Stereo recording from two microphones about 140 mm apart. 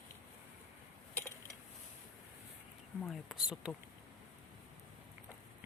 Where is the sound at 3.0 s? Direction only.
Centre (ahead or behind).